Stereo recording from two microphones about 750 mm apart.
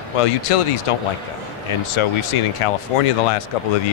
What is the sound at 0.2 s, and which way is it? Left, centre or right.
Speech, left.